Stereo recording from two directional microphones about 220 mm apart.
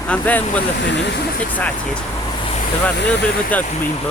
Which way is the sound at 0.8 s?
50° left (ahead or behind).